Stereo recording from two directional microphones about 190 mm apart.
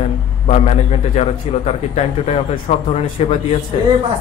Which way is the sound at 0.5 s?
35° left (ahead or behind).